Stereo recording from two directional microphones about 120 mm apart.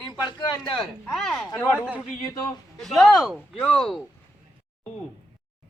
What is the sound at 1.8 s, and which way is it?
Speech, 10° right (ahead or behind).